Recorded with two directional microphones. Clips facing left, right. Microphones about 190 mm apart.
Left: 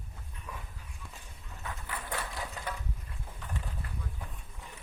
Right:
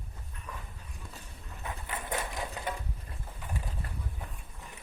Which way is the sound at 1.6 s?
20° right (ahead or behind).